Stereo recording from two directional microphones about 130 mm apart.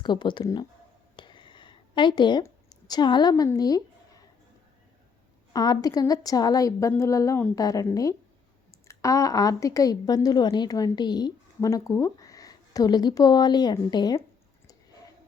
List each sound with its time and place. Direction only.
0.0 s a woman's voice: 35° left (ahead or behind)
1.1 s a sound: 35° left (ahead or behind)
2.4 s speech: 30° left (ahead or behind)
5.5 s a woman's voice: 30° left (ahead or behind)